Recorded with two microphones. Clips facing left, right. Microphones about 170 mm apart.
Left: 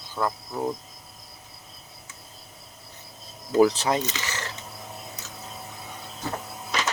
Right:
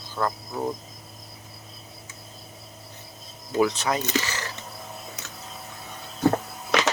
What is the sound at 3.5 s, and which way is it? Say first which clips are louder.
Speech: left 3 dB; 30° left (ahead or behind).